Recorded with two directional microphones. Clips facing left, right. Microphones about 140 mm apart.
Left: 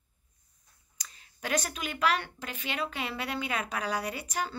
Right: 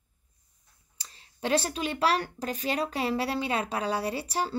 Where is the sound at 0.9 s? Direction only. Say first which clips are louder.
Even; 30° right (ahead or behind).